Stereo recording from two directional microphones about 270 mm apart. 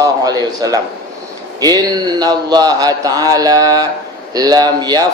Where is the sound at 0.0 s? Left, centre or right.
Centre.